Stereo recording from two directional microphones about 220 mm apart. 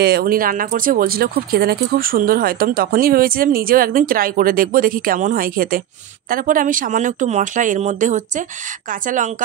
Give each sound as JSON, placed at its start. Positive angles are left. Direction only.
{"t": 0.0, "sound": "speech", "side_deg": -45}